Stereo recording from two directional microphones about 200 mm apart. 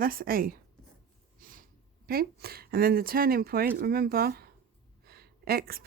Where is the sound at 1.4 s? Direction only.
45° right (ahead or behind).